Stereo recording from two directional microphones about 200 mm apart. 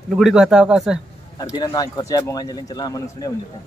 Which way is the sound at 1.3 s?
20° left (ahead or behind).